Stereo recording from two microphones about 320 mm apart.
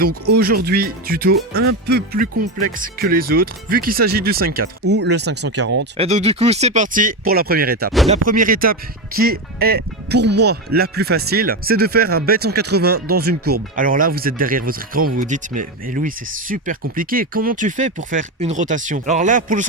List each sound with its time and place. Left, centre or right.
0.3 s speech: right
6.0 s speech: centre